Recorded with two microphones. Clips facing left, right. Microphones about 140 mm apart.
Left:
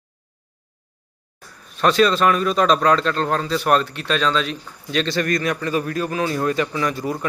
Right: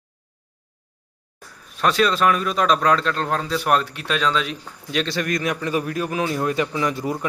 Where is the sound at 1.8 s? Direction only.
5° right (ahead or behind).